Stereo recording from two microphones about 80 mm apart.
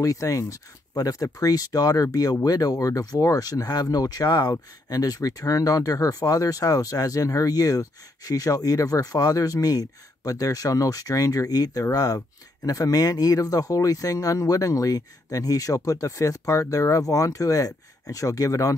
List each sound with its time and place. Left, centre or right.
0.0 s speech: left